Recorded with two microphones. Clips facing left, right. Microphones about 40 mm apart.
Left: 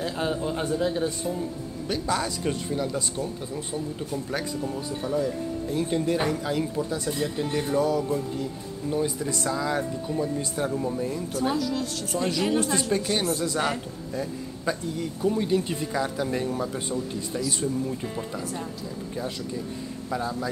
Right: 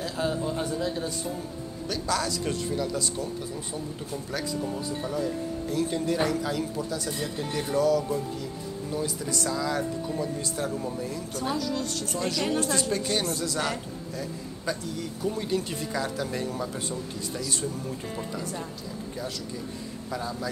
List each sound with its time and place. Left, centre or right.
0.0 s speech: left
4.6 s a woman's voice: centre
5.7 s speech: centre
7.1 s a woman's voice: centre
13.5 s speech: centre
20.1 s speech: centre